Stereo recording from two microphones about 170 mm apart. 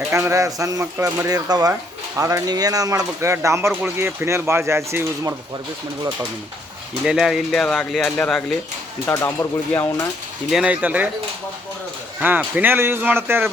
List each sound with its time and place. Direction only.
0.1 s speech: 15° right (ahead or behind)
7.0 s speech: 5° right (ahead or behind); by 10.1 s 15° left (ahead or behind)
10.5 s speech: 5° right (ahead or behind)
12.2 s speech: 10° right (ahead or behind)